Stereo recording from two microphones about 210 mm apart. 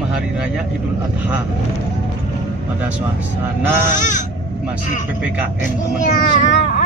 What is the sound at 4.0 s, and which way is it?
Speech, 35° left (ahead or behind).